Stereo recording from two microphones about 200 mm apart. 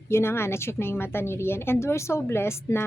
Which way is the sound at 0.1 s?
10° left (ahead or behind).